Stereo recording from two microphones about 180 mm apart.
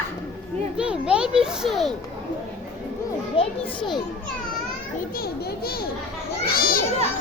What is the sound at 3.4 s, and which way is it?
Speech, 25° left (ahead or behind).